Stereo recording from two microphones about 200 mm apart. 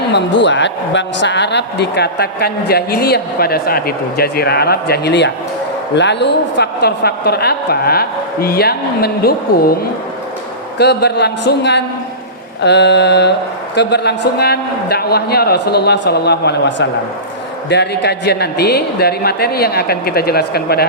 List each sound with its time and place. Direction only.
0.1 s a woman's voice: 60° left (ahead or behind)
10.8 s a man's voice: 55° left (ahead or behind)